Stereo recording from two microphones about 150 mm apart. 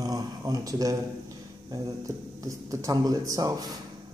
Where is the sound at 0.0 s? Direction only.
25° right (ahead or behind).